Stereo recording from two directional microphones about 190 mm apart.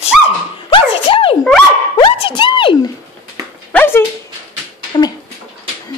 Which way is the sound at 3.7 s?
10° left (ahead or behind).